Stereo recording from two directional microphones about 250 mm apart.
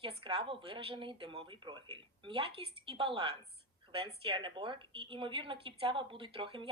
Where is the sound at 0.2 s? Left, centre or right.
Right.